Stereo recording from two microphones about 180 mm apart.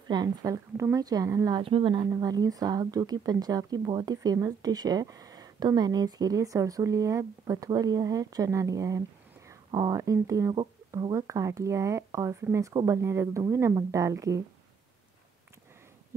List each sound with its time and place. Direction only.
0.1 s speech: 20° right (ahead or behind)